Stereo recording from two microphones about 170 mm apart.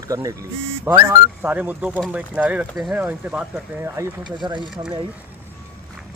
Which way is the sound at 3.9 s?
25° right (ahead or behind).